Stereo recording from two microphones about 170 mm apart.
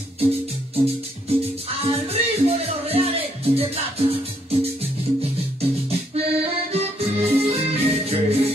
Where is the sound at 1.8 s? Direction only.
35° right (ahead or behind).